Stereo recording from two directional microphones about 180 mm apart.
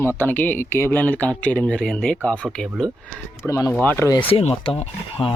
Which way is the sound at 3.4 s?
15° left (ahead or behind).